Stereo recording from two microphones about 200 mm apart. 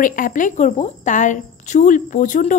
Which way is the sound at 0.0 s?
40° left (ahead or behind).